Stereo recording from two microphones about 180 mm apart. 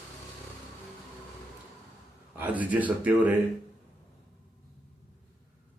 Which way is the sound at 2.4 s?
10° right (ahead or behind).